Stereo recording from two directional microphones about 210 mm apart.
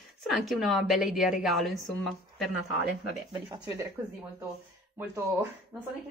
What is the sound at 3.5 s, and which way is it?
Speech, 15° right (ahead or behind).